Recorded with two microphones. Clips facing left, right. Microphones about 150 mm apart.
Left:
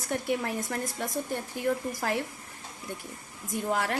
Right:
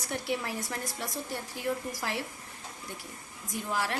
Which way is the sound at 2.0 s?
55° left (ahead or behind).